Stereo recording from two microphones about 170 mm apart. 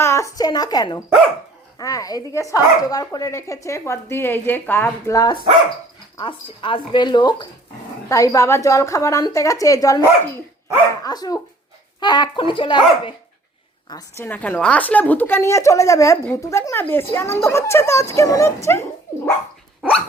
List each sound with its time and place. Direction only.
0.0 s a woman's voice: 15° left (ahead or behind)
13.9 s a woman's voice: 15° left (ahead or behind)